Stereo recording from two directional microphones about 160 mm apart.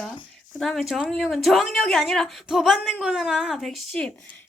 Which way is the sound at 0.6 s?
Centre (ahead or behind).